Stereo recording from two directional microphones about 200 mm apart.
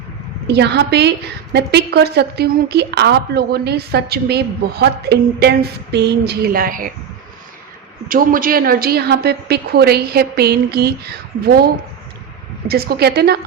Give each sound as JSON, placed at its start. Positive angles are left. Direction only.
{"t": 0.4, "sound": "a woman's voice", "side_deg": -55}
{"t": 8.0, "sound": "a woman's voice", "side_deg": -45}